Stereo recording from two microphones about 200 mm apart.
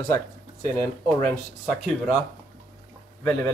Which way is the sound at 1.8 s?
Centre (ahead or behind).